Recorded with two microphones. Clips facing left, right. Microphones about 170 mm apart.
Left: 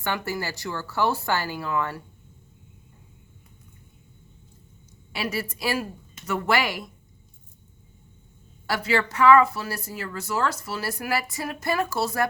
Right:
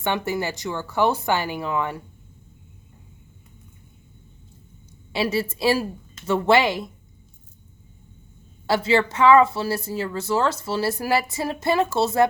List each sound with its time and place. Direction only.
0.0 s speech: 20° right (ahead or behind)
5.1 s speech: 25° right (ahead or behind)
8.6 s speech: 25° right (ahead or behind)